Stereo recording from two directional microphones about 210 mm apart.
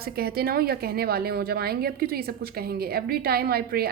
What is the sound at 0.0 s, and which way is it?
A woman's voice, 45° right (ahead or behind).